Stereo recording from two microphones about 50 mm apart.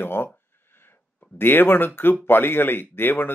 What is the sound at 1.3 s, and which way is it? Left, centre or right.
Speech, left.